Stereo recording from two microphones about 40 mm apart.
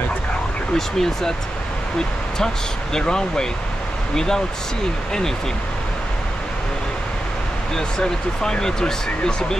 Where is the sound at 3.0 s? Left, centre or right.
Centre.